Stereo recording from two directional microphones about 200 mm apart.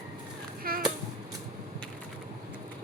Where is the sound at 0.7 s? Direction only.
45° right (ahead or behind).